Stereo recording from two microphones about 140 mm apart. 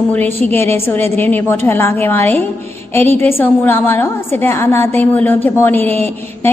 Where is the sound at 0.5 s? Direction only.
15° left (ahead or behind).